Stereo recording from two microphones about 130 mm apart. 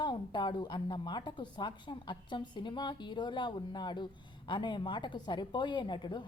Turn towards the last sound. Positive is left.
turn(degrees=35)  # may be behind; listen again after turning